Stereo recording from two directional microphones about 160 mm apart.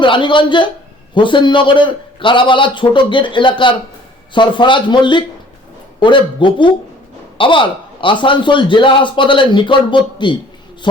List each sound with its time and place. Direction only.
0.0 s a man's voice: 30° left (ahead or behind)